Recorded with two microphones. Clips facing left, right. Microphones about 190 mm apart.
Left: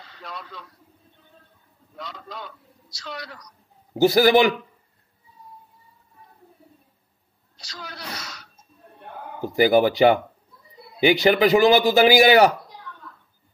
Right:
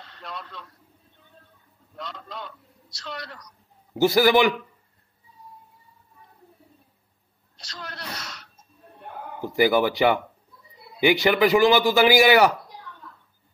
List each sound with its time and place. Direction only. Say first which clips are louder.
0.0 s speech: even; centre (ahead or behind)
2.0 s a man's voice: even; centre (ahead or behind)
3.9 s a man's voice: left 2 dB; 35° left (ahead or behind)
7.5 s speech: even; centre (ahead or behind)
9.6 s a man's voice: left 3 dB; 40° left (ahead or behind)